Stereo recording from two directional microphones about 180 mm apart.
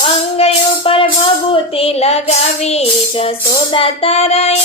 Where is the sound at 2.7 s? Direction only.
35° left (ahead or behind).